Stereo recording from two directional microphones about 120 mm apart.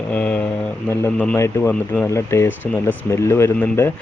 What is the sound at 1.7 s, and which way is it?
Speech, 10° left (ahead or behind).